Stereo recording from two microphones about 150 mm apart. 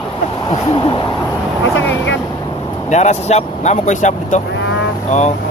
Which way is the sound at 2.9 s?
50° left (ahead or behind).